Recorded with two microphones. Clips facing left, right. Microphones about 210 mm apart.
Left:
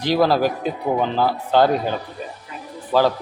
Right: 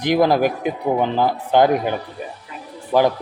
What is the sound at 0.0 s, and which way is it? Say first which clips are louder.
Speech: right 1 dB; 15° right (ahead or behind).